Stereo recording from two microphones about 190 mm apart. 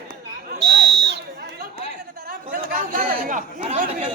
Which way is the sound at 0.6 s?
60° right (ahead or behind).